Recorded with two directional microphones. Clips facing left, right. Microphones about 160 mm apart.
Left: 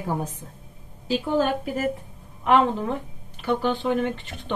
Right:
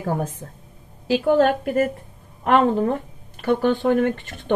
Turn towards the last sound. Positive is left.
turn(degrees=-50)  # may be behind; listen again after turning